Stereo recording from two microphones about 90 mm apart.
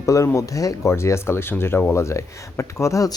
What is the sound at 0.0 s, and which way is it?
Speech, 35° left (ahead or behind).